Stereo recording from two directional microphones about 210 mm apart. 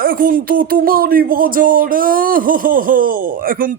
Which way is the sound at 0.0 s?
45° right (ahead or behind).